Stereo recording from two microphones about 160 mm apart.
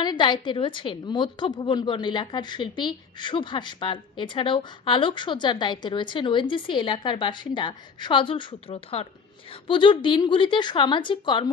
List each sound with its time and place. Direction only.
0.0 s a woman's voice: 25° left (ahead or behind)